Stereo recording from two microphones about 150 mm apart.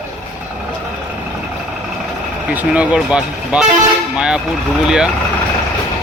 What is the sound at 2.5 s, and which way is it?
Speech, 10° right (ahead or behind).